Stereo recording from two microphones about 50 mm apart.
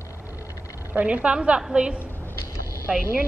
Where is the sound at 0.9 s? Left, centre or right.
Right.